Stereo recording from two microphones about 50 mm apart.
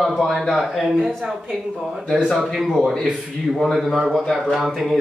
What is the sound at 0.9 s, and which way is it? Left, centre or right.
Speech, centre.